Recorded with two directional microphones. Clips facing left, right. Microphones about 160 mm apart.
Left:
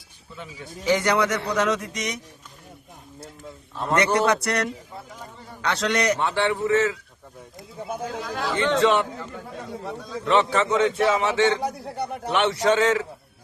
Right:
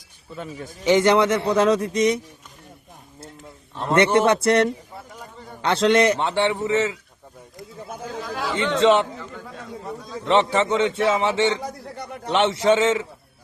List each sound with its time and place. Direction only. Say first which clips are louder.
0.3 s a man's voice: right 6 dB; 45° right (ahead or behind)
0.9 s a man's voice: right 5 dB; 20° right (ahead or behind)
3.8 s a man's voice: right 3 dB; 25° right (ahead or behind)
8.0 s speech: right 2 dB; 5° right (ahead or behind)
8.8 s a man's voice: right 5 dB; 20° right (ahead or behind)
10.2 s a man's voice: right 2 dB; 25° right (ahead or behind)